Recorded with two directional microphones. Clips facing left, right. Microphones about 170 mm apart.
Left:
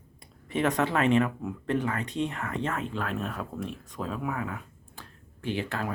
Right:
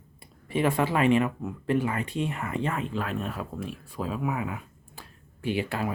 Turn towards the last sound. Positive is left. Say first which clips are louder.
# right 3 dB
turn(degrees=-10)  # may be behind; listen again after turning